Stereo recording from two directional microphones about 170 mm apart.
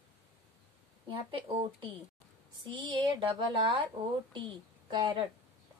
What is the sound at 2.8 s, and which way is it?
Speech, 30° right (ahead or behind).